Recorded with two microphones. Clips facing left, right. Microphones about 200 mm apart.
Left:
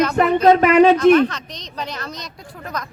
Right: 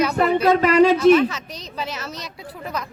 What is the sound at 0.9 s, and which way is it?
Speech, 5° right (ahead or behind).